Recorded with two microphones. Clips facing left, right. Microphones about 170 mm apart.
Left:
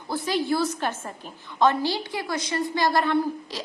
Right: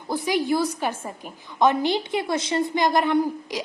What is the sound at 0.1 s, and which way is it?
A woman's voice, 15° right (ahead or behind).